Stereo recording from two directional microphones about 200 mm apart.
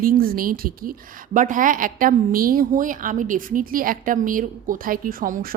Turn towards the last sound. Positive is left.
turn(degrees=-45)  # may be behind; listen again after turning